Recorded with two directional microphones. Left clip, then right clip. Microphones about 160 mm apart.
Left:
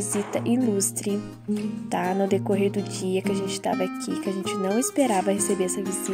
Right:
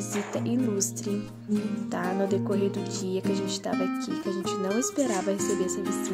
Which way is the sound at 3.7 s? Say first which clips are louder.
Left 2 dB; centre (ahead or behind).